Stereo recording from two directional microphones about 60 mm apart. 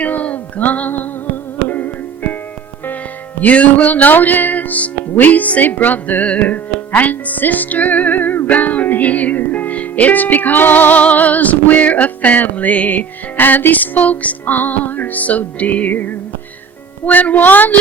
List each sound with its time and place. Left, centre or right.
0.0 s a sound: left
1.6 s music: left
3.4 s a woman's voice: left